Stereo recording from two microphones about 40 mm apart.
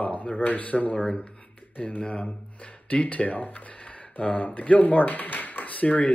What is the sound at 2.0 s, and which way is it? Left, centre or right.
Speech, left.